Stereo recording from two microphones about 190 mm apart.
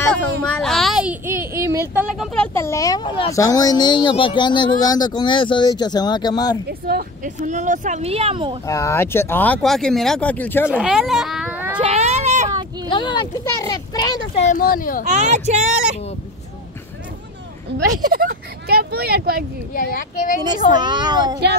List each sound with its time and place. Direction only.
0.0 s a child's voice: 5° left (ahead or behind); by 6.6 s 20° left (ahead or behind)
6.9 s speech: 45° right (ahead or behind); by 8.5 s 30° right (ahead or behind)
8.6 s speech: 15° left (ahead or behind)
10.7 s speech: 5° right (ahead or behind)
11.8 s baby cry: 35° right (ahead or behind)
12.9 s speech: 25° left (ahead or behind)
14.4 s speech: 45° left (ahead or behind)
15.0 s speech: 35° right (ahead or behind)
18.0 s speech: 50° right (ahead or behind)
19.7 s speech: 50° left (ahead or behind)
20.7 s speech: 25° right (ahead or behind)